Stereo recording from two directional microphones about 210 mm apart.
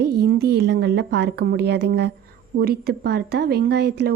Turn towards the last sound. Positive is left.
turn(degrees=-50)  # may be behind; listen again after turning